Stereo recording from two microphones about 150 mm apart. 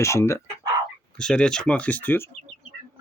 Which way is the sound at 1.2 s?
5° left (ahead or behind).